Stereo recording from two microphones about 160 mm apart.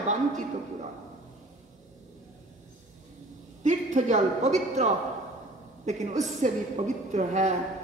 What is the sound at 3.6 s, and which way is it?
A man's voice, 50° right (ahead or behind).